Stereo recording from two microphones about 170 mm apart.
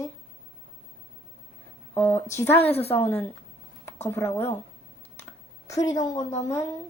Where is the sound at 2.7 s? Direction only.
35° left (ahead or behind).